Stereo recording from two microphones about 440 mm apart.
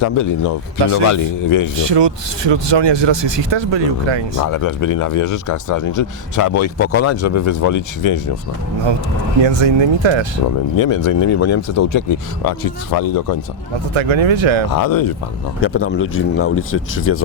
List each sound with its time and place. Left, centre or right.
0.0 s speech: left
1.8 s speech: right
4.4 s speech: left
9.4 s speech: right
10.8 s speech: left
12.5 s speech: left
13.9 s speech: right
14.7 s speech: left
15.6 s speech: left